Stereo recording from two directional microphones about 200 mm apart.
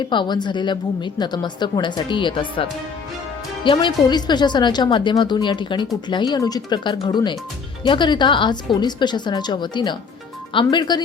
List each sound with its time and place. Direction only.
0.1 s a woman's voice: 20° left (ahead or behind)